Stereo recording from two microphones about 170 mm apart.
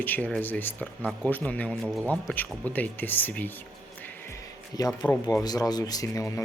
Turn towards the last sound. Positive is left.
turn(degrees=20)  # may be behind; listen again after turning